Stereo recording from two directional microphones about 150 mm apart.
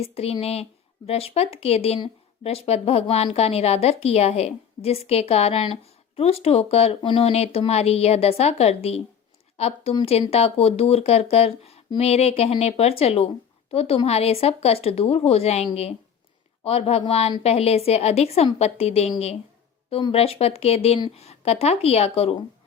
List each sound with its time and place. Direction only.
0.0 s speech: 40° left (ahead or behind)